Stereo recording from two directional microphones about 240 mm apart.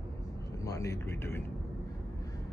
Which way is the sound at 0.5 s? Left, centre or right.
Centre.